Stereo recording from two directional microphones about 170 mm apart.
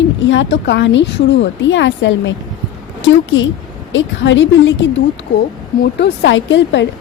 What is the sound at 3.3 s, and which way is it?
A woman's voice, 90° left.